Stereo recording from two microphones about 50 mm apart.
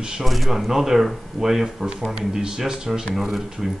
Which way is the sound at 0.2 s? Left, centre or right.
Centre.